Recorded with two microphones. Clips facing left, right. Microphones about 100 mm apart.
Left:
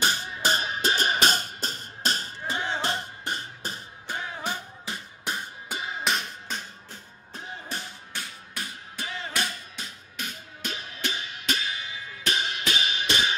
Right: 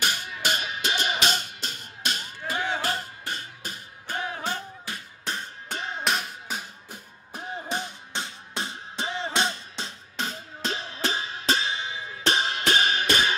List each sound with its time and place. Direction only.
0.0 s music: 30° left (ahead or behind)
2.4 s a sound: 25° left (ahead or behind)
2.8 s music: 20° left (ahead or behind)
4.4 s music: 15° left (ahead or behind); by 12.6 s 35° right (ahead or behind)
12.6 s music: 50° right (ahead or behind)